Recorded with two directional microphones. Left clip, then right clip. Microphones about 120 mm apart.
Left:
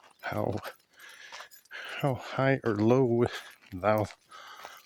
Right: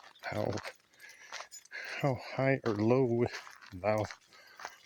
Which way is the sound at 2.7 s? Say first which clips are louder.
Left 4 dB; 70° left (ahead or behind).